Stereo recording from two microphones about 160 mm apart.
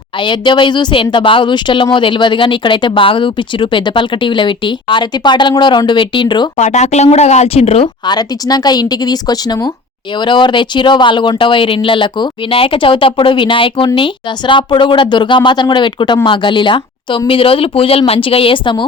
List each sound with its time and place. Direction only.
0.2 s speech: 30° left (ahead or behind)
6.6 s speech: 45° left (ahead or behind)